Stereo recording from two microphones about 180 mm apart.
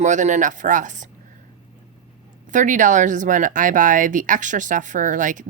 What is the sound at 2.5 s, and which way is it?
Speech, 45° right (ahead or behind).